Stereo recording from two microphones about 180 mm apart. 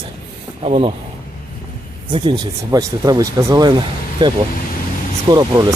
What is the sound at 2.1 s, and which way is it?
Speech, 25° right (ahead or behind).